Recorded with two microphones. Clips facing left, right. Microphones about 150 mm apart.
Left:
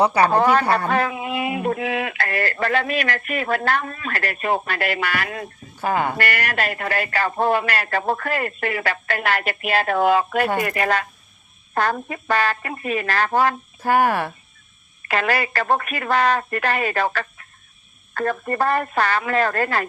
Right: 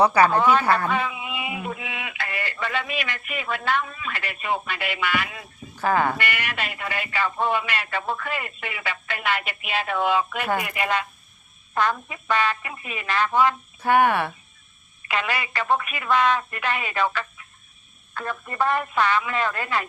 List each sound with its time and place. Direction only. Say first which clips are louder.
0.0 s speech: even; 25° left (ahead or behind)
0.3 s speech: left 2 dB; 40° left (ahead or behind)
5.8 s speech: even; 20° left (ahead or behind)
6.1 s speech: left 5 dB; 40° left (ahead or behind)
18.1 s speech: left 9 dB; 50° left (ahead or behind)